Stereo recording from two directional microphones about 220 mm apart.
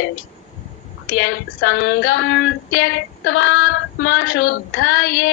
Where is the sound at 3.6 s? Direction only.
60° left (ahead or behind).